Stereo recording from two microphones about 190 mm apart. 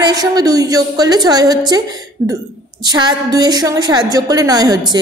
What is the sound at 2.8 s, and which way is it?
A woman's voice, 20° right (ahead or behind).